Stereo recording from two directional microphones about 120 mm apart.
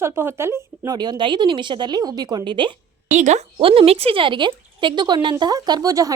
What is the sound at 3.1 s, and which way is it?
Speech, 80° right.